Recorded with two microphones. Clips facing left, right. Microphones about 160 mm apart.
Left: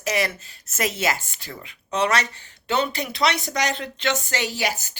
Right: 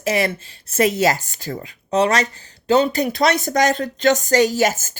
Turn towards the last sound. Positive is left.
turn(degrees=-45)  # may be behind; listen again after turning